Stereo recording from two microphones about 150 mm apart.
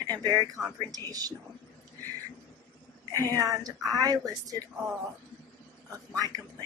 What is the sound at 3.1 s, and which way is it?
A woman's voice, 25° right (ahead or behind).